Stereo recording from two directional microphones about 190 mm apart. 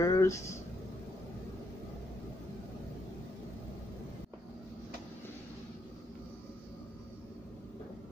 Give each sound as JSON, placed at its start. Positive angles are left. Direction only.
{"t": 0.0, "sound": "speech", "side_deg": 15}